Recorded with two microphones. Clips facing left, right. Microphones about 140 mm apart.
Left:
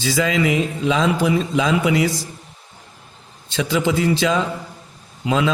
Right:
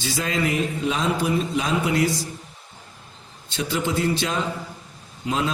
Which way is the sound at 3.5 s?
90° left.